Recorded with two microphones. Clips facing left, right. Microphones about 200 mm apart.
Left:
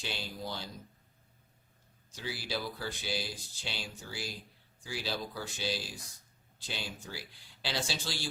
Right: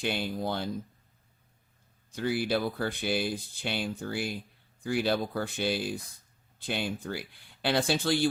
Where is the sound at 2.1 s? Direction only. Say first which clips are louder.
Right 10 dB; 55° right (ahead or behind).